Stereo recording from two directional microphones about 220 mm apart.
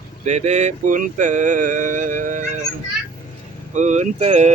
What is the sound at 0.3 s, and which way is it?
Speech, 30° right (ahead or behind).